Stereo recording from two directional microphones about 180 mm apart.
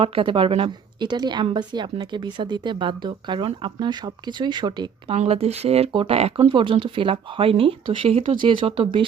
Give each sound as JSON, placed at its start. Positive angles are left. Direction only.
{"t": 0.0, "sound": "a woman's voice", "side_deg": -30}
{"t": 5.1, "sound": "speech", "side_deg": -35}